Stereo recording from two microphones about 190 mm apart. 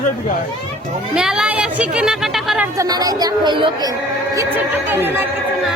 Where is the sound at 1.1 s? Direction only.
5° right (ahead or behind).